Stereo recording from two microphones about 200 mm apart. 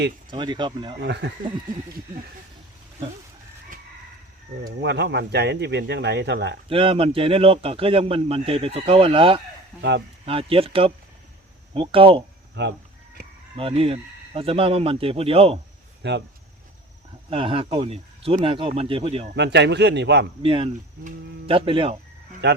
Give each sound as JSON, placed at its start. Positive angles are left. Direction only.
{"t": 0.3, "sound": "speech", "side_deg": -20}
{"t": 1.0, "sound": "speech", "side_deg": -60}
{"t": 4.8, "sound": "speech", "side_deg": -60}
{"t": 6.7, "sound": "speech", "side_deg": -25}
{"t": 12.6, "sound": "speech", "side_deg": -60}
{"t": 13.6, "sound": "speech", "side_deg": -30}
{"t": 16.0, "sound": "speech", "side_deg": -60}
{"t": 17.2, "sound": "speech", "side_deg": -25}
{"t": 19.4, "sound": "speech", "side_deg": -60}
{"t": 20.4, "sound": "speech", "side_deg": -25}
{"t": 22.4, "sound": "speech", "side_deg": -60}